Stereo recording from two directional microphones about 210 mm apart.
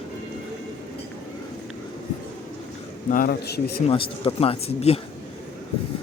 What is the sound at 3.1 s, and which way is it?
Speech, 45° left (ahead or behind).